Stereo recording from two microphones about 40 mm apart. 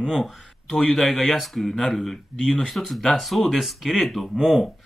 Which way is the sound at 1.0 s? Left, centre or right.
Centre.